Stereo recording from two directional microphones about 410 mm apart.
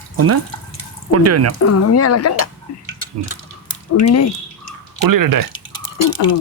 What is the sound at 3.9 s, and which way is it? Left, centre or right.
Speech, left.